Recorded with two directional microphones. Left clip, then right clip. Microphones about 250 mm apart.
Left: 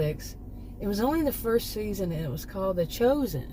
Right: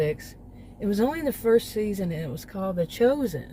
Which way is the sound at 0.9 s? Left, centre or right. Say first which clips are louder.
Even; right.